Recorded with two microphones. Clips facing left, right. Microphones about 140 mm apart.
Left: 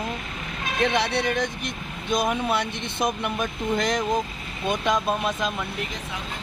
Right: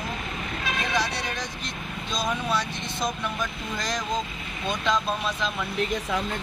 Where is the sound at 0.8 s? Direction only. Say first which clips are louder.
Left 7 dB; 60° left (ahead or behind).